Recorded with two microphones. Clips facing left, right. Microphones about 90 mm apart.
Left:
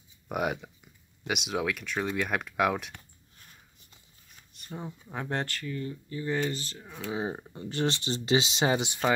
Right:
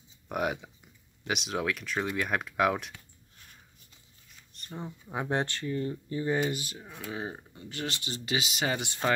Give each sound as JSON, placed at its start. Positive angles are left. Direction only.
{"t": 0.3, "sound": "speech", "side_deg": 0}
{"t": 4.5, "sound": "speech", "side_deg": 5}
{"t": 5.1, "sound": "speech", "side_deg": -15}
{"t": 6.3, "sound": "speech", "side_deg": -10}
{"t": 7.1, "sound": "speech", "side_deg": 20}
{"t": 7.5, "sound": "speech", "side_deg": 35}